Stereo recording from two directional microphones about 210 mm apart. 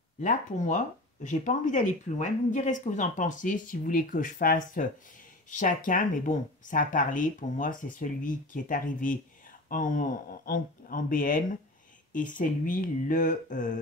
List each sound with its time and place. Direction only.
0.2 s speech: 35° left (ahead or behind)